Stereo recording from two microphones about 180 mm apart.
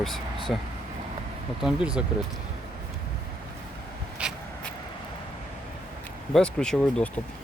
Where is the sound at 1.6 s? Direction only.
5° right (ahead or behind).